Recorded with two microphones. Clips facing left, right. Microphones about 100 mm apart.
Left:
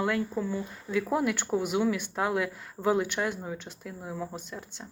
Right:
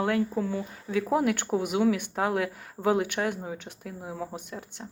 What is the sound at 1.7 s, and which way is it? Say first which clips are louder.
Speech: right 5 dB; 55° right (ahead or behind).